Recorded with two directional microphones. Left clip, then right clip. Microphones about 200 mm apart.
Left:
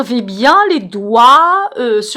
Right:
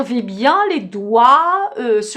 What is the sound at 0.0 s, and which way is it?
A woman's voice, 25° left (ahead or behind).